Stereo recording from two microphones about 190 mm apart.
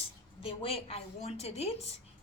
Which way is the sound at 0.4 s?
30° left (ahead or behind).